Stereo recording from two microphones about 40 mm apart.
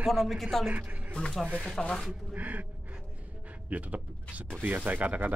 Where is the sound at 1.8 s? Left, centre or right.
Centre.